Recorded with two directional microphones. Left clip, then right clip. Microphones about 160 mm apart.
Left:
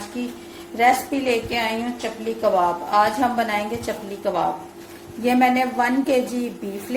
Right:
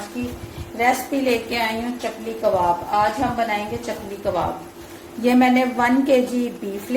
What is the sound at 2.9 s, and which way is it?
Speech, 35° left (ahead or behind).